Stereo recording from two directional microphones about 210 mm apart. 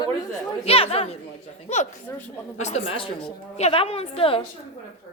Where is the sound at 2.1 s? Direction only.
10° left (ahead or behind).